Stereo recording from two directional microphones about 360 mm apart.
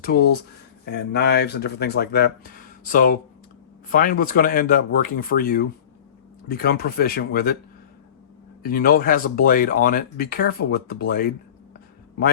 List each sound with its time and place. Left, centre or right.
0.0 s speech: left
8.6 s speech: left